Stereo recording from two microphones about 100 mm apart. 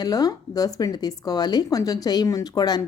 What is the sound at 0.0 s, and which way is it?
Speech, 40° left (ahead or behind).